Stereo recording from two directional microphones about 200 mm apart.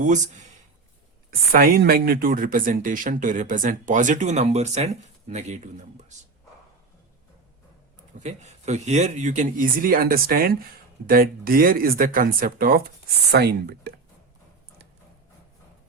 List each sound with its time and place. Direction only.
1.3 s speech: 45° right (ahead or behind)
8.2 s speech: 35° right (ahead or behind); by 13.9 s 55° right (ahead or behind)